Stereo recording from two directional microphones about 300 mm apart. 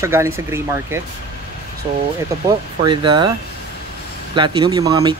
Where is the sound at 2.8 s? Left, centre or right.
Centre.